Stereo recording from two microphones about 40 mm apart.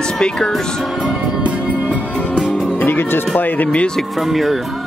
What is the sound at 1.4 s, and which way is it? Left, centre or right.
Music, right.